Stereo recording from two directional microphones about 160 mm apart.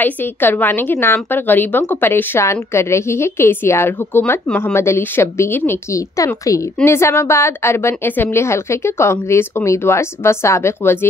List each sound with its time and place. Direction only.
0.0 s a woman's voice: 10° left (ahead or behind)